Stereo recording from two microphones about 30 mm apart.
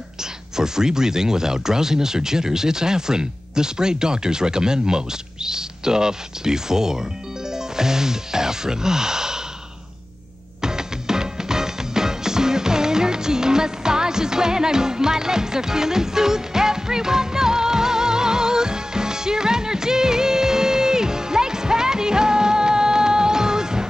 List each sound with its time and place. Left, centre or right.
0.2 s speech: centre
10.6 s music: centre